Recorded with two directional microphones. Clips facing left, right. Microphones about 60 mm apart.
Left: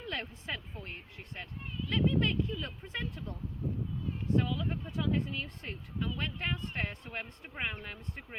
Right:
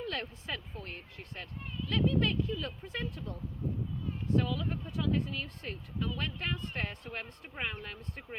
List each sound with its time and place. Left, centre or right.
0.1 s speech: left
4.4 s speech: left